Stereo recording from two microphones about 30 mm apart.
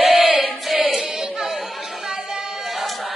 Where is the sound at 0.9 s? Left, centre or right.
Right.